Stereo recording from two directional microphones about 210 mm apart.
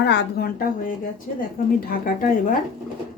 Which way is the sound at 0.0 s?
55° left (ahead or behind).